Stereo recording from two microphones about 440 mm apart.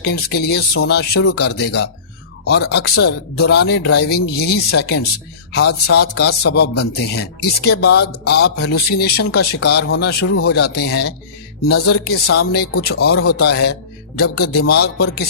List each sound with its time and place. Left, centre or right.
0.0 s a man's voice: left